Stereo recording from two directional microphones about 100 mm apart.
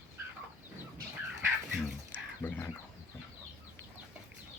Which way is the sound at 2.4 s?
20° left (ahead or behind).